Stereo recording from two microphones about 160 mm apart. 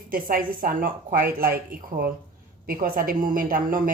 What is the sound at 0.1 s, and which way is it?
Speech, 60° right (ahead or behind).